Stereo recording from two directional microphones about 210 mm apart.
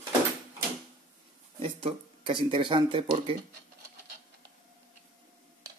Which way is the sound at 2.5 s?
25° right (ahead or behind).